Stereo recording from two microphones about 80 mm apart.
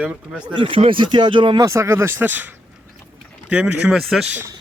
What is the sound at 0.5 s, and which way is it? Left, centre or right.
Speech, right.